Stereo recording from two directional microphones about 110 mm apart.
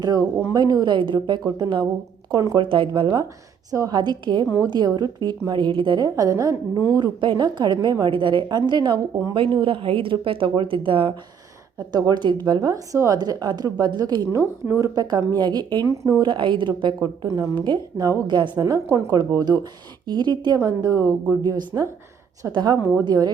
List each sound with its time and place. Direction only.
0.0 s a woman's voice: 35° right (ahead or behind)
2.3 s a woman's voice: 35° right (ahead or behind)
2.6 s a woman's voice: 50° right (ahead or behind)
3.7 s a woman's voice: 35° right (ahead or behind)
6.1 s a woman's voice: 30° right (ahead or behind)
7.0 s a woman's voice: 45° right (ahead or behind)
11.9 s a woman's voice: 35° right (ahead or behind)
15.9 s a woman's voice: 30° right (ahead or behind)
16.2 s a woman's voice: 45° right (ahead or behind)
17.2 s a woman's voice: 30° right (ahead or behind)
17.5 s a woman's voice: 45° right (ahead or behind)
20.6 s a woman's voice: 30° right (ahead or behind)